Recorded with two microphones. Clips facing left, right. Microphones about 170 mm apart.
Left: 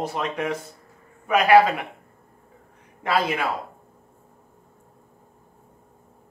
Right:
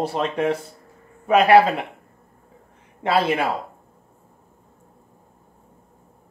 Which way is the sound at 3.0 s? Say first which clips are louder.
Right 3 dB; 30° right (ahead or behind).